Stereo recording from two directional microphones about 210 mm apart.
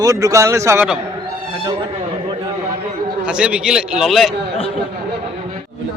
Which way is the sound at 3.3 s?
5° right (ahead or behind).